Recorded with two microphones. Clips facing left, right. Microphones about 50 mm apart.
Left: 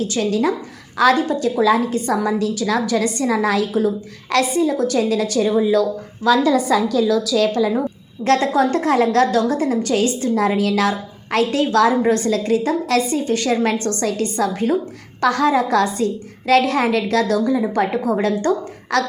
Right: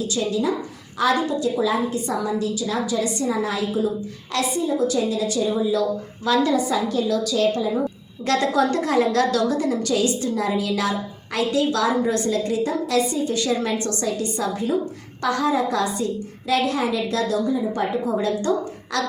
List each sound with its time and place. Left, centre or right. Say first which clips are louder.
0.1 s a woman's voice: left 2 dB; left
1.6 s a woman's voice: left 6 dB; left
2.0 s a woman's voice: left 5 dB; left
3.8 s a woman's voice: left 4 dB; left
6.5 s a woman's voice: left 4 dB; left
8.2 s a woman's voice: left 4 dB; left
13.2 s a woman's voice: left 4 dB; left
14.1 s a woman's voice: left 4 dB; left